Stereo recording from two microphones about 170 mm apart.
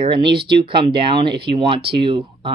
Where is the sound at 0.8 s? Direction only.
30° right (ahead or behind).